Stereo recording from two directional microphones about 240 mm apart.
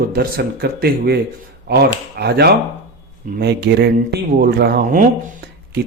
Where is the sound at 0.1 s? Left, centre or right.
Right.